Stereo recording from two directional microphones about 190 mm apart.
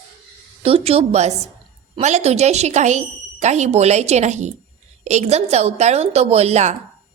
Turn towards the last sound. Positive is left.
turn(degrees=-35)  # may be behind; listen again after turning